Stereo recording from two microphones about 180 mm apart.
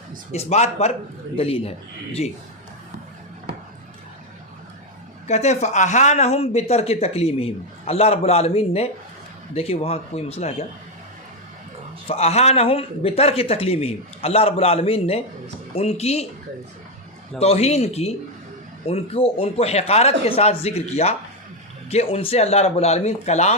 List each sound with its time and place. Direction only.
0.3 s speech: 35° left (ahead or behind)
5.3 s speech: 40° left (ahead or behind)
12.0 s speech: 35° left (ahead or behind)
17.4 s speech: 35° left (ahead or behind)